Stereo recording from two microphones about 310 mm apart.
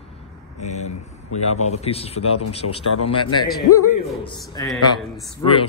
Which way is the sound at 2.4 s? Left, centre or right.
Left.